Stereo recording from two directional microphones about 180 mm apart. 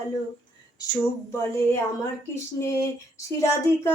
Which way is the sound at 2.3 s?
15° left (ahead or behind).